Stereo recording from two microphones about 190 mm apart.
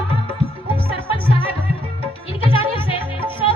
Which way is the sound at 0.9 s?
30° left (ahead or behind).